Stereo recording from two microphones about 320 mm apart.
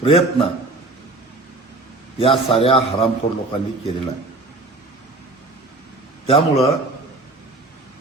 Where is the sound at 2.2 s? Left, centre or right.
Centre.